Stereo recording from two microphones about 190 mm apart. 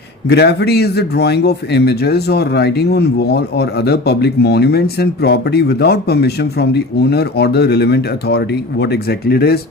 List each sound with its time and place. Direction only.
0.3 s speech: 60° left (ahead or behind)